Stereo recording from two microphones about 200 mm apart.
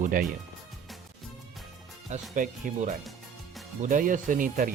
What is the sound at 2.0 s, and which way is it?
Speech, 40° right (ahead or behind).